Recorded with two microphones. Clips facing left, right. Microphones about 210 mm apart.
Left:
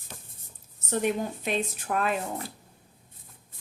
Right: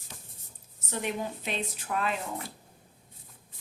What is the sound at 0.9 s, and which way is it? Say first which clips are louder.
A woman's voice: left 6 dB; 50° left (ahead or behind).